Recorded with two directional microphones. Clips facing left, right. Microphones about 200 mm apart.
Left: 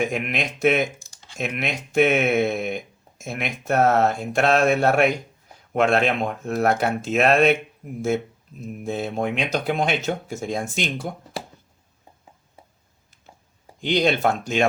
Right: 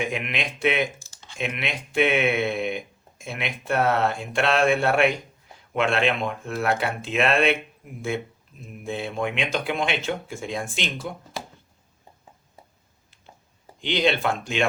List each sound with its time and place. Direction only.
0.0 s speech: 45° left (ahead or behind)
8.6 s speech: 40° left (ahead or behind)
13.8 s speech: 45° left (ahead or behind)